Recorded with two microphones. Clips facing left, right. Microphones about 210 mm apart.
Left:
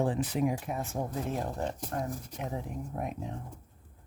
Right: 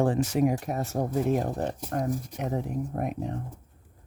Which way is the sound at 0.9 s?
45° right (ahead or behind).